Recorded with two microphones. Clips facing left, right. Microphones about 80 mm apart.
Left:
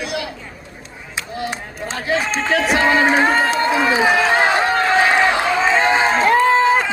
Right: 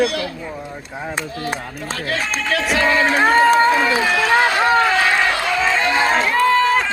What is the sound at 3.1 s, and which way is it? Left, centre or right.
Speech, centre.